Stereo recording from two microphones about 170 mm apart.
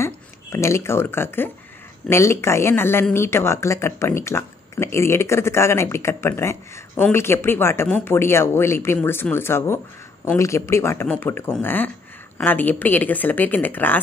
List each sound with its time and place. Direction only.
0.0 s speech: 15° left (ahead or behind)